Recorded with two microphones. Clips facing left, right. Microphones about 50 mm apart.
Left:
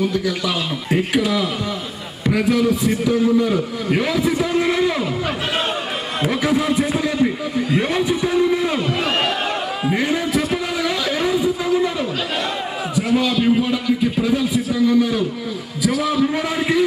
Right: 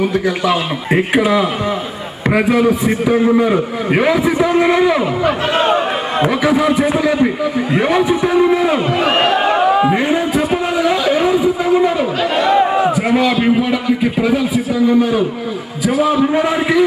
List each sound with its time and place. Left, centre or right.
0.0 s a man's voice: right
9.8 s a sound: right
13.3 s a man's voice: right